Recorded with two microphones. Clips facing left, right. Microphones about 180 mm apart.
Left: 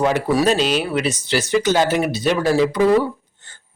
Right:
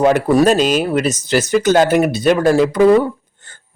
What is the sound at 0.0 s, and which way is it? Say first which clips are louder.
Speech: right 5 dB; 50° right (ahead or behind).